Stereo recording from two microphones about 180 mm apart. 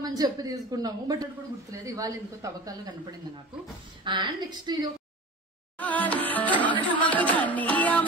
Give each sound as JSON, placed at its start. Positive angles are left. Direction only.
{"t": 0.0, "sound": "a man's voice", "side_deg": -20}
{"t": 5.8, "sound": "music", "side_deg": 10}